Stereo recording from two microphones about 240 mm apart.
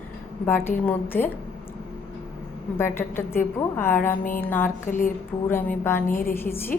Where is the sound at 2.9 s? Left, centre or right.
Centre.